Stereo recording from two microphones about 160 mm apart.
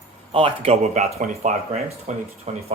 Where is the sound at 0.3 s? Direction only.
40° right (ahead or behind).